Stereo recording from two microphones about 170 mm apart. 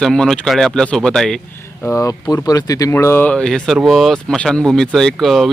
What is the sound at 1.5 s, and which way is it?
Speech, 15° left (ahead or behind).